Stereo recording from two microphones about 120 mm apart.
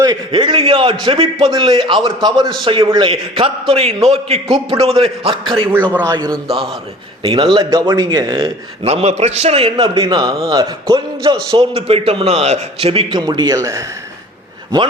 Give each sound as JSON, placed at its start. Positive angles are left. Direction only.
{"t": 0.0, "sound": "a man's voice", "side_deg": -35}
{"t": 5.7, "sound": "speech", "side_deg": -15}
{"t": 6.1, "sound": "a man's voice", "side_deg": -30}
{"t": 7.2, "sound": "a man's voice", "side_deg": -40}
{"t": 7.6, "sound": "speech", "side_deg": -30}
{"t": 8.8, "sound": "a man's voice", "side_deg": -60}
{"t": 11.7, "sound": "a man's voice", "side_deg": -55}
{"t": 13.1, "sound": "speech", "side_deg": -35}